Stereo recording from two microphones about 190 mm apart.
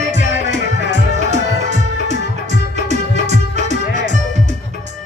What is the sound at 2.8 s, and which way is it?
Music, 35° right (ahead or behind).